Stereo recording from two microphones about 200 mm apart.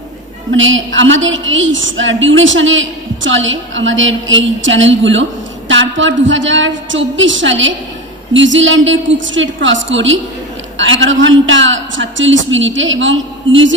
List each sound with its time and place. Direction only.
0.5 s a man's voice: 75° right (ahead or behind)